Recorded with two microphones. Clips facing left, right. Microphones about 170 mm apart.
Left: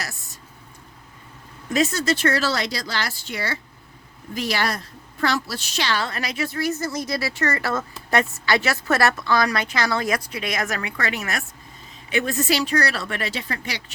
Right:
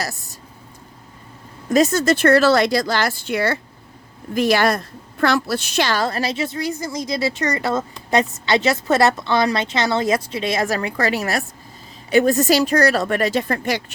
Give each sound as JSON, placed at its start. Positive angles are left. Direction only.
{"t": 0.0, "sound": "speech", "side_deg": -35}
{"t": 1.7, "sound": "a woman's voice", "side_deg": -45}